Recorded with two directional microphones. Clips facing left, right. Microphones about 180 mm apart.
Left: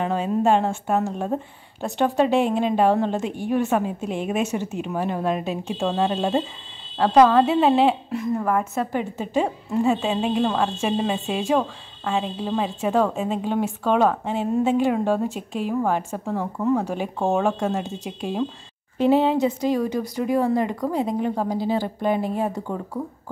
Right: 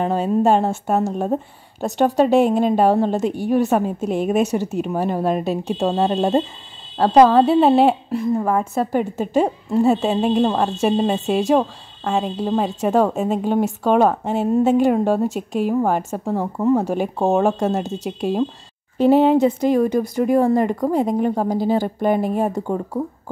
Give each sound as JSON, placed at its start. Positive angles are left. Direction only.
{"t": 0.0, "sound": "a woman's voice", "side_deg": -40}
{"t": 8.9, "sound": "a woman's voice", "side_deg": -45}